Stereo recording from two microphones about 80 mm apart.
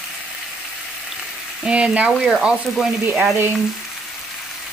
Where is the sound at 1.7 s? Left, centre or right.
Centre.